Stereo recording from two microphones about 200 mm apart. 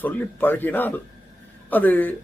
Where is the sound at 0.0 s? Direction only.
10° left (ahead or behind).